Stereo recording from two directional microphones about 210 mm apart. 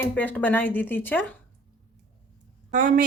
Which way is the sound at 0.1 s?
5° left (ahead or behind).